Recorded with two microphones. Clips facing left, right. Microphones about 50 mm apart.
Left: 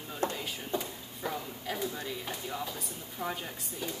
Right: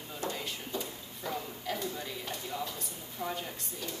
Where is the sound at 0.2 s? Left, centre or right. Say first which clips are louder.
Left 4 dB; left.